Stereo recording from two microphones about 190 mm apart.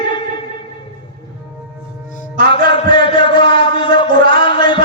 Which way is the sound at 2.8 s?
25° left (ahead or behind).